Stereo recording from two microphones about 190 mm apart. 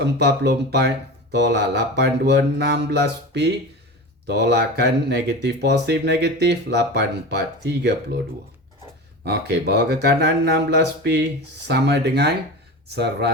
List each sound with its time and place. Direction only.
0.0 s speech: 60° right (ahead or behind)
9.2 s speech: 60° right (ahead or behind)